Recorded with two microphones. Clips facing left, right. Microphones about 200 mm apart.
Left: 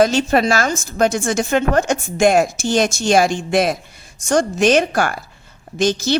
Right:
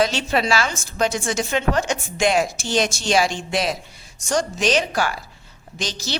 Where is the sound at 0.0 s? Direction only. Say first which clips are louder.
Left 6 dB; 45° left (ahead or behind).